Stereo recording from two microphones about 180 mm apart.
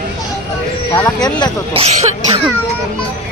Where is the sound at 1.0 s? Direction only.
20° left (ahead or behind).